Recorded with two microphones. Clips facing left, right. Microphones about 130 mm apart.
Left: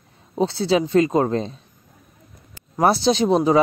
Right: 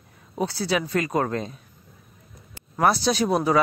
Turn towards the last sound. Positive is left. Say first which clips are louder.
# left 4 dB
turn(degrees=25)  # may be behind; listen again after turning